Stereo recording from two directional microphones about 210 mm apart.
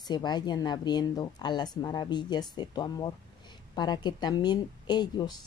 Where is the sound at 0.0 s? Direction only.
20° left (ahead or behind).